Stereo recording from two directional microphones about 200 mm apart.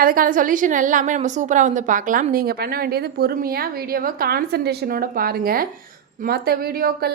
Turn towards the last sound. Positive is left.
turn(degrees=-50)  # may be behind; listen again after turning